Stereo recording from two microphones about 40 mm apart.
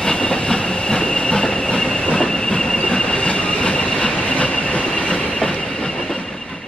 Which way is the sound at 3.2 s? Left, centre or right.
Left.